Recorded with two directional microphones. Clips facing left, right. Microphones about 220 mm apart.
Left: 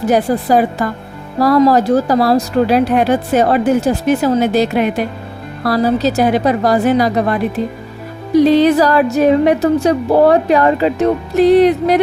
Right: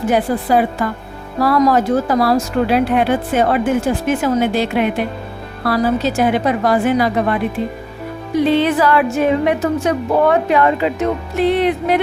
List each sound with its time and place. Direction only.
0.0 s a woman's voice: 40° left (ahead or behind)